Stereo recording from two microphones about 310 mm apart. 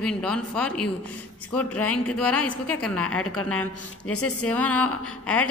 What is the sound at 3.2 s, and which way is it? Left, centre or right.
A woman's voice, left.